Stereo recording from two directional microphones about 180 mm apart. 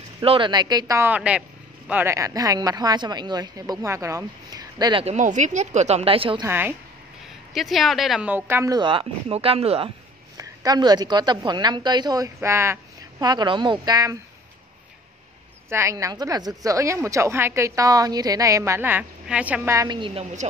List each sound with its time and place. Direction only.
0.2 s a woman's voice: 30° right (ahead or behind)
5.0 s speech: 40° right (ahead or behind)
6.4 s a woman's voice: 10° right (ahead or behind)
7.5 s a woman's voice: centre (ahead or behind); by 9.8 s 30° right (ahead or behind)
10.3 s a woman's voice: 20° right (ahead or behind)
15.7 s a woman's voice: 15° right (ahead or behind)